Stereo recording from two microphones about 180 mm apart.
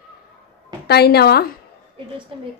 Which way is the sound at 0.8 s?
65° left (ahead or behind).